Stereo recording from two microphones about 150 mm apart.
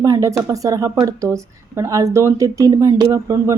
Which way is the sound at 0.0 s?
20° right (ahead or behind).